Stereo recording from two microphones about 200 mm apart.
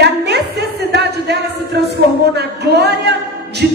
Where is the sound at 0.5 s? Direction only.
55° right (ahead or behind).